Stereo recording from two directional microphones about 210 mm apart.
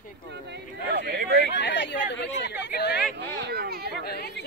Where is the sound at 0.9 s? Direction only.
50° right (ahead or behind).